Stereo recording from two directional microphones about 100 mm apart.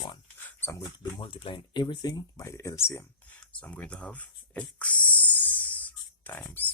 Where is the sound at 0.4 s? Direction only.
20° left (ahead or behind).